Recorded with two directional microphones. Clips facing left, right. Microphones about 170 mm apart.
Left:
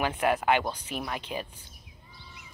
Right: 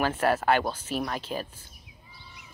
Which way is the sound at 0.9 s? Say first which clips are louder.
Right 5 dB; 40° right (ahead or behind).